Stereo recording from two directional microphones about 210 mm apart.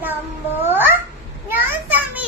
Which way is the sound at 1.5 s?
10° right (ahead or behind).